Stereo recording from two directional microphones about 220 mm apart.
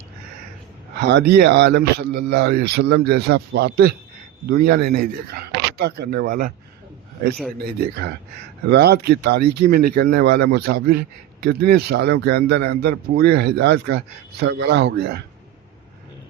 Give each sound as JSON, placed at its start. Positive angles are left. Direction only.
{"t": 0.9, "sound": "speech", "side_deg": -50}
{"t": 7.6, "sound": "speech", "side_deg": -50}